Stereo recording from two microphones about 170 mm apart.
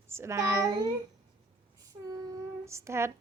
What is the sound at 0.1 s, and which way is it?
Speech, 15° right (ahead or behind).